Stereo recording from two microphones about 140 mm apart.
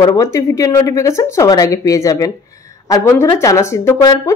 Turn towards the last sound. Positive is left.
turn(degrees=20)  # may be behind; listen again after turning